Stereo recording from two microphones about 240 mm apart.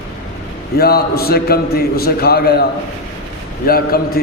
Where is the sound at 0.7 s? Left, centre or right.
Left.